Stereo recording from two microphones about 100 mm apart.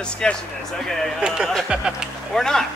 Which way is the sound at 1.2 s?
10° right (ahead or behind).